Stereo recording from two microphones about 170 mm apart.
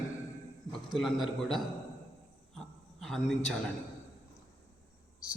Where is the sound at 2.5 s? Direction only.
Centre (ahead or behind).